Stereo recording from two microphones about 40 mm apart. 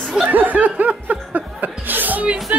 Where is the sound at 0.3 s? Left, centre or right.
Right.